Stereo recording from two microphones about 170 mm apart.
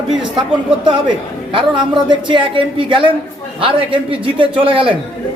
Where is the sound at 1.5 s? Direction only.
30° right (ahead or behind).